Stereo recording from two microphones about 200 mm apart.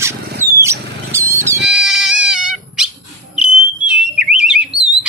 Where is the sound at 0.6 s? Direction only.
15° right (ahead or behind).